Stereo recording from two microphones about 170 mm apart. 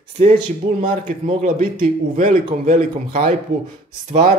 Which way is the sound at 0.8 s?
45° right (ahead or behind).